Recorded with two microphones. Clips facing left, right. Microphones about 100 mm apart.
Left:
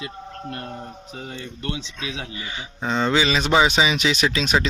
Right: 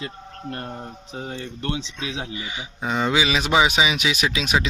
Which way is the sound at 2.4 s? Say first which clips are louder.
Even; 10° right (ahead or behind).